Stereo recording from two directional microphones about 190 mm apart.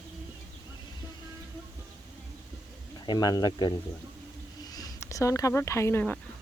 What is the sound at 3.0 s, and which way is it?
Speech, 20° left (ahead or behind).